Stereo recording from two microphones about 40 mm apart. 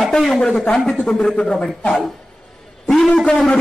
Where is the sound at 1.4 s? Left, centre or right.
Centre.